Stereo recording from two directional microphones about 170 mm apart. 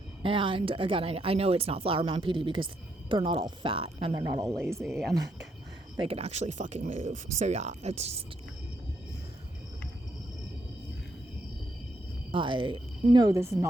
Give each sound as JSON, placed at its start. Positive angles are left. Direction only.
{"t": 0.2, "sound": "speech", "side_deg": -30}
{"t": 4.8, "sound": "speech", "side_deg": -5}
{"t": 6.0, "sound": "speech", "side_deg": -35}
{"t": 12.3, "sound": "speech", "side_deg": -30}